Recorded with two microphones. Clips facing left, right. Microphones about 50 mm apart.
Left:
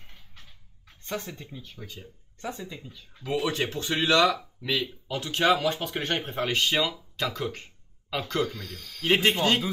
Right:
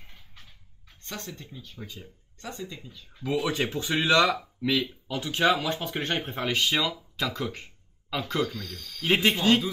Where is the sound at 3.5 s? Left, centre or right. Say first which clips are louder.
Right 1 dB; centre.